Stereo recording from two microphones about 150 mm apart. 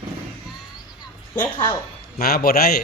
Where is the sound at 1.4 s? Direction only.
15° left (ahead or behind).